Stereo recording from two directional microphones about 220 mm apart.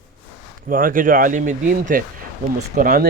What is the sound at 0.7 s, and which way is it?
Speech, 40° right (ahead or behind).